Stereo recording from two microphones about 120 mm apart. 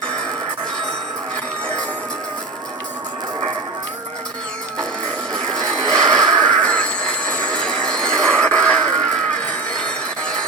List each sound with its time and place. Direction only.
5.3 s music: 5° left (ahead or behind)
5.8 s music: 35° right (ahead or behind)
6.4 s train: 10° left (ahead or behind)
9.8 s a sound: 5° left (ahead or behind)